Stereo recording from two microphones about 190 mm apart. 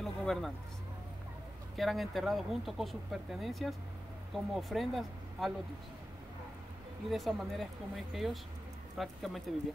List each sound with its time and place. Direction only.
0.0 s a sound: centre (ahead or behind)
1.8 s speech: centre (ahead or behind)
7.1 s speech: centre (ahead or behind)